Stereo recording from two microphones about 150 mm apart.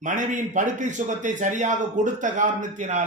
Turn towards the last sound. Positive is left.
turn(degrees=-55)  # may be behind; listen again after turning